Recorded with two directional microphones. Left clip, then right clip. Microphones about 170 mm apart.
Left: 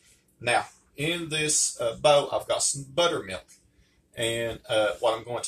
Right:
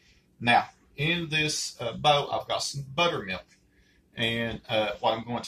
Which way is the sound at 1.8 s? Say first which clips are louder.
Left 3 dB; 20° left (ahead or behind).